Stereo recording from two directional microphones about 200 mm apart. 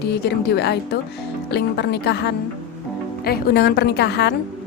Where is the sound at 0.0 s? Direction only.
55° left (ahead or behind).